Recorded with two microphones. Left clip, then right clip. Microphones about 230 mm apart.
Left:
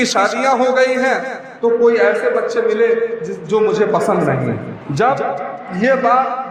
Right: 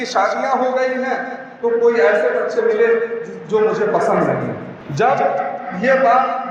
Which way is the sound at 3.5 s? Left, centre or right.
Left.